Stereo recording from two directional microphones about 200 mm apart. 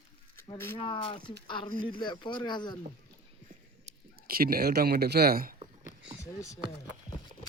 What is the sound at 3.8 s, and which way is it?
Speech, 45° right (ahead or behind).